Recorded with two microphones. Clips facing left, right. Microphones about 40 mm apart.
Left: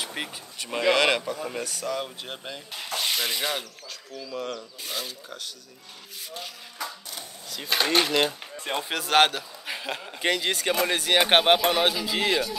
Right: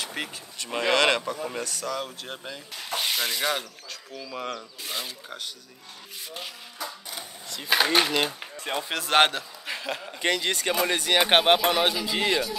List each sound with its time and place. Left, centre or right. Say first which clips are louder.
0.0 s speech: even; centre
3.1 s rub: right 1 dB; centre
4.1 s speech: left 1 dB; centre
7.1 s a sound: right 1 dB; centre
8.8 s speech: even; centre
9.7 s speech: even; centre